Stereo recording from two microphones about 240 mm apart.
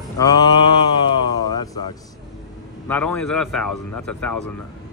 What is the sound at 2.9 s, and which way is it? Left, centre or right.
Speech, centre.